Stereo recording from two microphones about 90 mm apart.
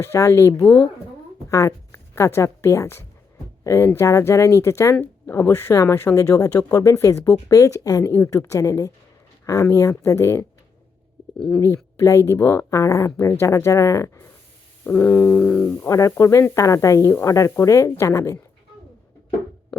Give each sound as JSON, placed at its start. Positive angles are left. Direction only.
{"t": 0.0, "sound": "speech", "side_deg": 30}
{"t": 0.6, "sound": "speech", "side_deg": 10}
{"t": 1.5, "sound": "a woman's voice", "side_deg": 35}
{"t": 11.3, "sound": "speech", "side_deg": 10}
{"t": 11.6, "sound": "speech", "side_deg": 35}
{"t": 14.8, "sound": "a sound", "side_deg": 20}
{"t": 15.9, "sound": "speech", "side_deg": 40}